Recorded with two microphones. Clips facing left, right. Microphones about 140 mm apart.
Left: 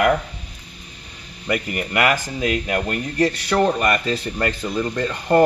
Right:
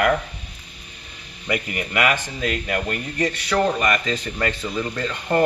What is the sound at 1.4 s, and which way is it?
Speech, centre (ahead or behind).